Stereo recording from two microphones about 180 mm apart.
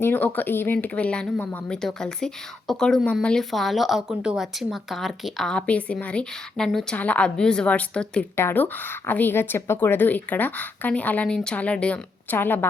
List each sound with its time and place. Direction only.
0.0 s speech: 10° left (ahead or behind)